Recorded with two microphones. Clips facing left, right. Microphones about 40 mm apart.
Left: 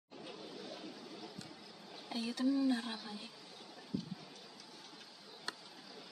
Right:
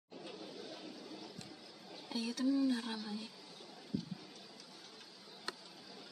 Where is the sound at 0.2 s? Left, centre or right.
Centre.